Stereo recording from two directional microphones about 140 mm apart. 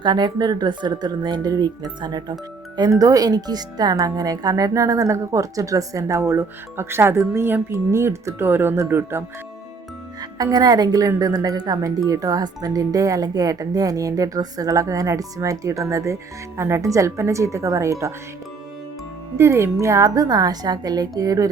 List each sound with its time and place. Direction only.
0.0 s speech: 30° right (ahead or behind)
10.2 s a woman's voice: 30° right (ahead or behind)
19.4 s speech: 20° right (ahead or behind)